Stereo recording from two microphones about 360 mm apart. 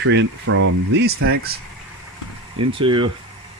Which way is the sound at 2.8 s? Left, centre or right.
Centre.